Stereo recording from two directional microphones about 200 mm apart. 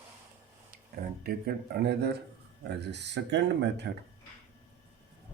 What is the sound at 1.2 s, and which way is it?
Speech, 50° right (ahead or behind).